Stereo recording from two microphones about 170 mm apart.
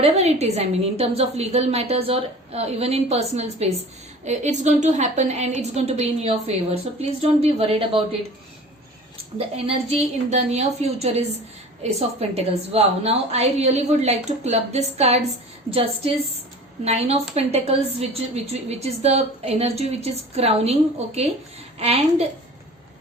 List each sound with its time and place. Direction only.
0.0 s a woman's voice: 40° right (ahead or behind)
9.6 s a woman's voice: 35° right (ahead or behind)